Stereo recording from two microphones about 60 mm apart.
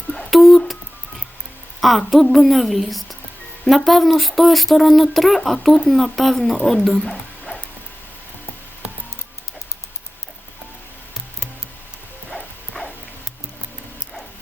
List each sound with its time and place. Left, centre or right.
0.3 s speech: centre
1.8 s speech: centre
7.0 s a sound: centre
12.7 s dog: centre